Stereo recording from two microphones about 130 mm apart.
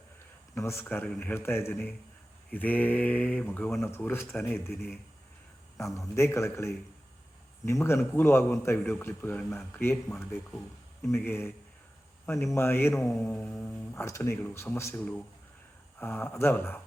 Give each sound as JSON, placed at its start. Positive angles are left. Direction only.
{"t": 0.5, "sound": "a man's voice", "side_deg": 20}
{"t": 5.7, "sound": "a man's voice", "side_deg": 0}
{"t": 6.1, "sound": "a man's voice", "side_deg": 20}
{"t": 11.1, "sound": "a man's voice", "side_deg": 20}
{"t": 12.3, "sound": "mantra", "side_deg": 5}
{"t": 12.5, "sound": "speech", "side_deg": 20}
{"t": 13.1, "sound": "mantra", "side_deg": 5}
{"t": 13.6, "sound": "a man's voice", "side_deg": 15}